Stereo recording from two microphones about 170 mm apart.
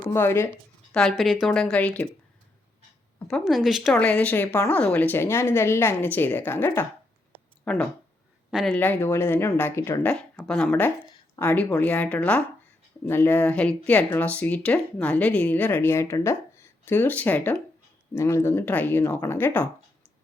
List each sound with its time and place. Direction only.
0.1 s speech: 15° left (ahead or behind)
0.9 s a woman's voice: centre (ahead or behind)
3.2 s a woman's voice: centre (ahead or behind)